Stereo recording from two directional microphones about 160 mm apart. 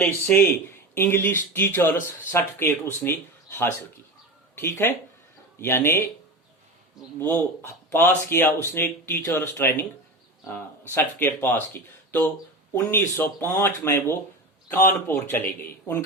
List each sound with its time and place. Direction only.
0.0 s speech: 10° left (ahead or behind)
7.2 s speech: 10° left (ahead or behind)
10.9 s speech: 15° left (ahead or behind)